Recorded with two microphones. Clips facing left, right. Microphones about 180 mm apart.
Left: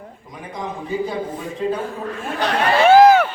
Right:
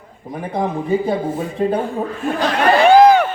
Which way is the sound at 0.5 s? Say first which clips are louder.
Right 7 dB; 60° right (ahead or behind).